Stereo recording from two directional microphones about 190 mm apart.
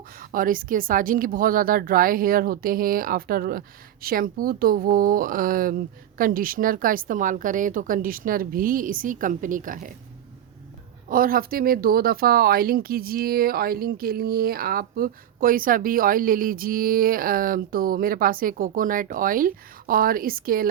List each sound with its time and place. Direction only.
0.2 s speech: 45° right (ahead or behind)
11.1 s speech: 50° right (ahead or behind)